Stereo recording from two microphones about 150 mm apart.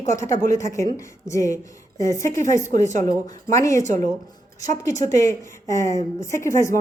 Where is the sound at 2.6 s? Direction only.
55° right (ahead or behind).